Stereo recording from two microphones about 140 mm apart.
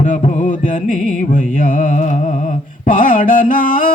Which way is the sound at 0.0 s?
70° left (ahead or behind).